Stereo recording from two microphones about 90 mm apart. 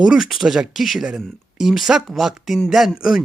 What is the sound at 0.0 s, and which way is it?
Speech, 5° right (ahead or behind).